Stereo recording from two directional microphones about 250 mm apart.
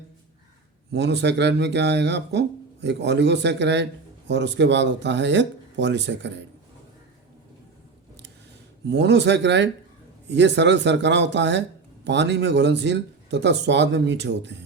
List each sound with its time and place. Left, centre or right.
0.9 s speech: right
8.9 s speech: right